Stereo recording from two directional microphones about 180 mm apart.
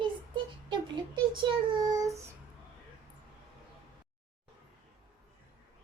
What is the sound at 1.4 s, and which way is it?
Child singing, 25° right (ahead or behind).